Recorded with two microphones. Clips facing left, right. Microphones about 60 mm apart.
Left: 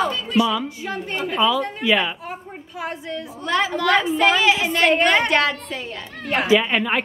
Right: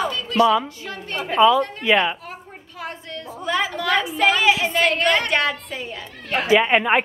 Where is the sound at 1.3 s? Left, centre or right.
Centre.